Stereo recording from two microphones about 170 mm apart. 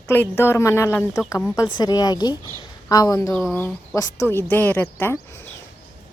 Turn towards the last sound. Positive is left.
turn(degrees=15)  # may be behind; listen again after turning